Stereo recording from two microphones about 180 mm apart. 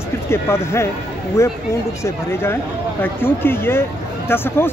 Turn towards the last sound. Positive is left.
turn(degrees=10)  # may be behind; listen again after turning